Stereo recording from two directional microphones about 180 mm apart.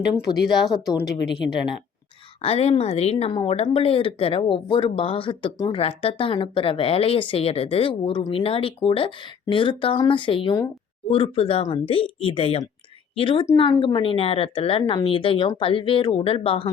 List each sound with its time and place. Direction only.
0.6 s a woman's voice: centre (ahead or behind)
1.0 s a woman's voice: 75° left (ahead or behind)
2.4 s a woman's voice: 35° left (ahead or behind)